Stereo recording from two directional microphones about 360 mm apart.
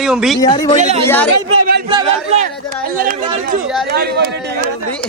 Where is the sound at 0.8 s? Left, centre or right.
Centre.